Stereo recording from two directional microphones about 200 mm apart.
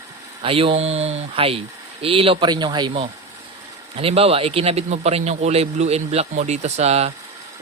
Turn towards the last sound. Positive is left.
turn(degrees=-30)  # may be behind; listen again after turning